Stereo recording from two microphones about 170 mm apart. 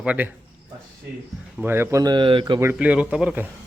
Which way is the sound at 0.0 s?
10° right (ahead or behind).